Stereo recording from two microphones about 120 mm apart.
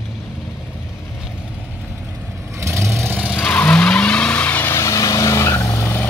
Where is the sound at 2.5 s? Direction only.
20° right (ahead or behind).